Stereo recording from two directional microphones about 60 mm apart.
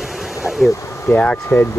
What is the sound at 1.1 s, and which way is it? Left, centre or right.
Speech, centre.